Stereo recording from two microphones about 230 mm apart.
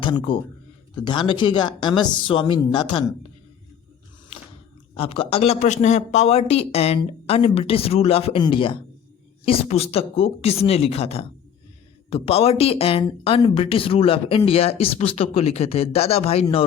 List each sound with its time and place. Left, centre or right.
0.0 s speech: left
4.9 s speech: left